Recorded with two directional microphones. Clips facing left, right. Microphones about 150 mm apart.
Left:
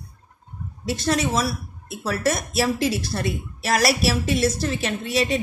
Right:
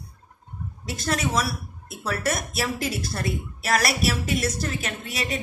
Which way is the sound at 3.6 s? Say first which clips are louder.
Left 3 dB; 30° left (ahead or behind).